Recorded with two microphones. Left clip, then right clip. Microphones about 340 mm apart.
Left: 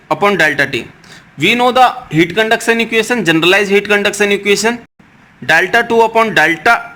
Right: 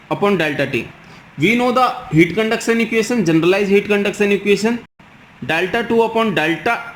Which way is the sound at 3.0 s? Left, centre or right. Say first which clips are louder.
Left 4 dB; left.